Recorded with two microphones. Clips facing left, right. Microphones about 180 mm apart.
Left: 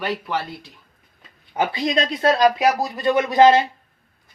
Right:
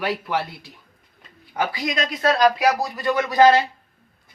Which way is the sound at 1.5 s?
25° left (ahead or behind).